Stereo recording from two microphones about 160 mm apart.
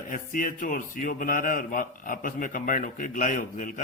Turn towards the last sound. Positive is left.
turn(degrees=55)  # may be behind; listen again after turning